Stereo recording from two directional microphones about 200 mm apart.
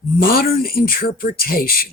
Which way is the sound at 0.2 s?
50° left (ahead or behind).